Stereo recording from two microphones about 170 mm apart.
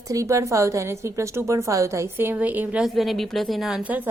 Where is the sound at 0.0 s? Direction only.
20° right (ahead or behind).